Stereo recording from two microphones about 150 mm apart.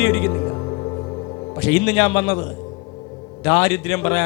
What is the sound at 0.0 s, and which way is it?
Music, 20° left (ahead or behind).